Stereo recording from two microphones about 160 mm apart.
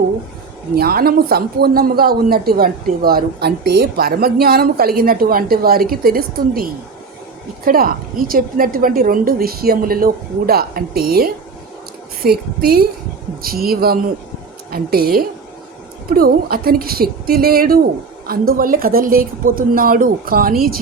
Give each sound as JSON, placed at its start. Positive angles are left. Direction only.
{"t": 0.8, "sound": "a woman's voice", "side_deg": -70}